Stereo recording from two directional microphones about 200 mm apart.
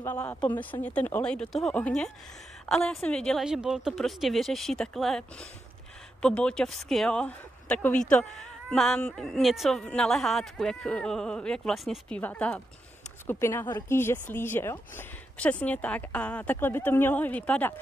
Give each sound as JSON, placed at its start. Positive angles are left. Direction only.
{"t": 0.0, "sound": "a woman's voice", "side_deg": 10}
{"t": 6.2, "sound": "a woman's voice", "side_deg": 5}